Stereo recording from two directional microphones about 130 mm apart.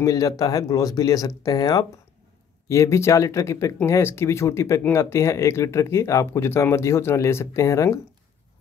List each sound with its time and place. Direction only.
0.0 s speech: 25° left (ahead or behind)